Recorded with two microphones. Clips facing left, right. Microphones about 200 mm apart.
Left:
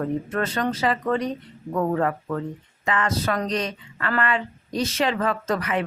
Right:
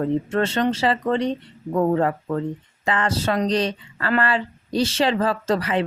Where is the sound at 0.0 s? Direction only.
30° right (ahead or behind).